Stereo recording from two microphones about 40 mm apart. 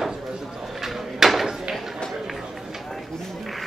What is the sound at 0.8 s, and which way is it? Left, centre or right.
Drawer open or close, centre.